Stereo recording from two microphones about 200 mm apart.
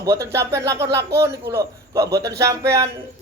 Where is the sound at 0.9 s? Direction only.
55° right (ahead or behind).